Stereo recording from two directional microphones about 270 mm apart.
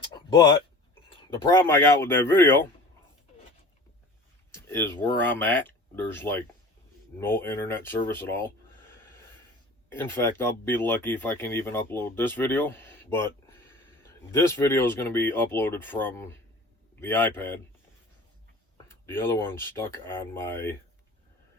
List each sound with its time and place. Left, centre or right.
1.4 s speech: centre
4.5 s speech: centre
9.9 s speech: centre
18.9 s speech: centre